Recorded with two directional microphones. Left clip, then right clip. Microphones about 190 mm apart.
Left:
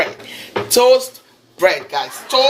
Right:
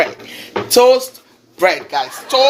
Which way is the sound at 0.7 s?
65° right (ahead or behind).